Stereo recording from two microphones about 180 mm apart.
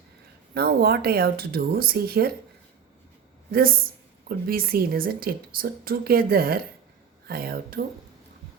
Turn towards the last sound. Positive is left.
turn(degrees=-55)  # may be behind; listen again after turning